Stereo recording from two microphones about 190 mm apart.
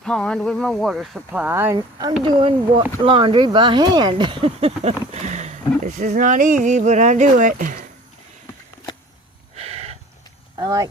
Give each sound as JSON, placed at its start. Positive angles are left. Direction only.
{"t": 0.0, "sound": "speech", "side_deg": 5}
{"t": 9.6, "sound": "a sound", "side_deg": -35}
{"t": 10.6, "sound": "speech", "side_deg": -20}